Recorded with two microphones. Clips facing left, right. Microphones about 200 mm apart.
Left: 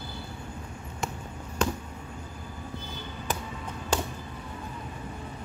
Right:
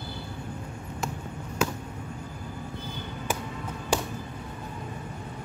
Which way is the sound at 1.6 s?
5° right (ahead or behind).